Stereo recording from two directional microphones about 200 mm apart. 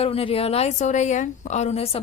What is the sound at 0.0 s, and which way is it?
Speech, 30° left (ahead or behind).